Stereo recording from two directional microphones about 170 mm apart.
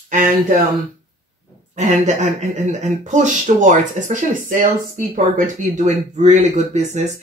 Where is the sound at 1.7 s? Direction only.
45° right (ahead or behind).